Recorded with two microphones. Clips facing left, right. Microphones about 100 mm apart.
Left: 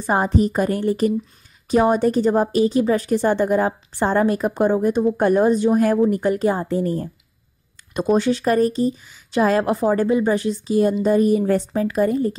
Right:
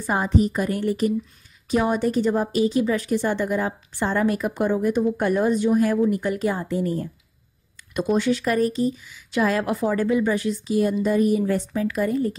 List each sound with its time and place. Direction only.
0.2 s a woman's voice: 45° left (ahead or behind)